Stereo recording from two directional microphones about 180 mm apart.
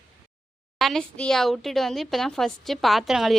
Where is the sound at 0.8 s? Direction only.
Centre (ahead or behind).